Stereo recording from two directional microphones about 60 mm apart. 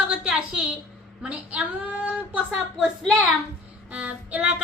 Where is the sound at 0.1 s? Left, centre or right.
Centre.